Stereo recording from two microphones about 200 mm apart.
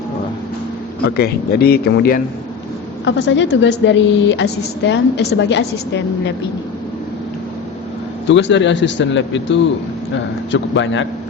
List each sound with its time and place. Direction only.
1.0 s a man's voice: 55° left (ahead or behind)
3.0 s a woman's voice: 65° left (ahead or behind)
8.3 s a woman's voice: 65° left (ahead or behind)